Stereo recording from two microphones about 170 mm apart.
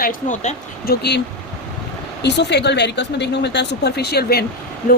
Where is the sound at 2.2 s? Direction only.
85° left.